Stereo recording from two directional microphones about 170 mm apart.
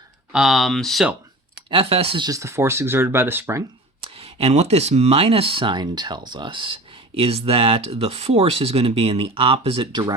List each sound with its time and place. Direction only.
0.3 s speech: centre (ahead or behind)
1.7 s speech: 35° right (ahead or behind); by 3.6 s 10° right (ahead or behind)
4.0 s speech: 35° right (ahead or behind)